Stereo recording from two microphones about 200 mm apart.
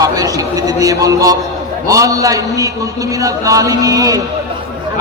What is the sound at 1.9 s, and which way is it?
A man's voice, 15° right (ahead or behind).